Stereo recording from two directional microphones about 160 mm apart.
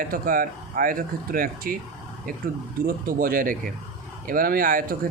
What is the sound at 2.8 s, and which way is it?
Speech, 65° right (ahead or behind).